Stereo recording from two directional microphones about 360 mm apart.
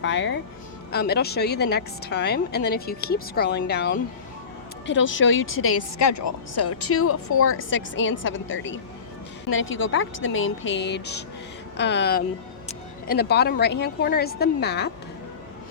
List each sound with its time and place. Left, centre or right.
0.0 s a woman's voice: left
6.0 s a woman's voice: left